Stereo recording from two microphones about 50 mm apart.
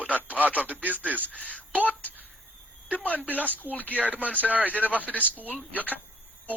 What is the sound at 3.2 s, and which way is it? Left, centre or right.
Speech, right.